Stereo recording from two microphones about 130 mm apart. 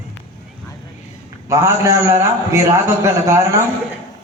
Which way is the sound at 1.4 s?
20° right (ahead or behind).